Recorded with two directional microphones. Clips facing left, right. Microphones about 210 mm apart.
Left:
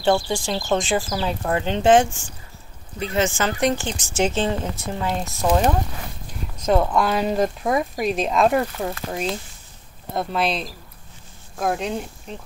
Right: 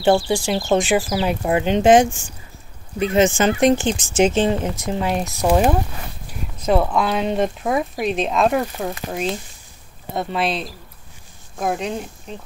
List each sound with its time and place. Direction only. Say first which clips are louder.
0.1 s speech: right 4 dB; 20° right (ahead or behind)
6.6 s speech: right 1 dB; 5° right (ahead or behind)
10.1 s speech: right 1 dB; centre (ahead or behind)